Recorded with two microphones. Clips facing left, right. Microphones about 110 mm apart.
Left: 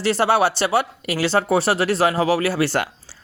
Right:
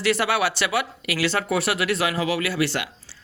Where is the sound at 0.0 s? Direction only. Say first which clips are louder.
Left 4 dB; 30° left (ahead or behind).